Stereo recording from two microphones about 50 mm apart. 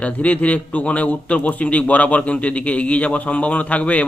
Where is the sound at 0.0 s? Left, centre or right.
Left.